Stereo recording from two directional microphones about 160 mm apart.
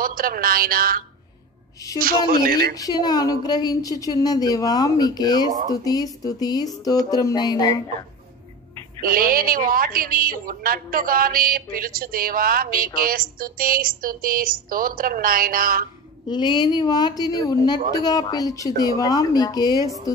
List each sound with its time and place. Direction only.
0.0 s a woman's voice: 65° right (ahead or behind)
2.7 s a woman's voice: 25° left (ahead or behind)
9.0 s a woman's voice: 65° right (ahead or behind)
16.3 s a woman's voice: 30° left (ahead or behind)